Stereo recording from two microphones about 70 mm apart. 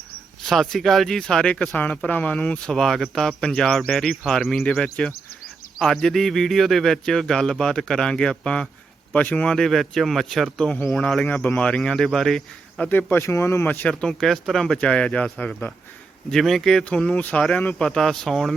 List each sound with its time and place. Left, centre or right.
0.4 s speech: centre
2.7 s a man's voice: centre
11.3 s speech: left; by 12.8 s centre
12.8 s speech: left
13.2 s speech: left
13.8 s speech: centre
16.3 s a man's voice: centre
17.0 s speech: left; by 18.5 s centre